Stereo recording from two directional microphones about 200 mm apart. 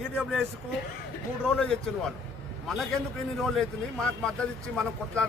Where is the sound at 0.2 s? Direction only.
Centre (ahead or behind).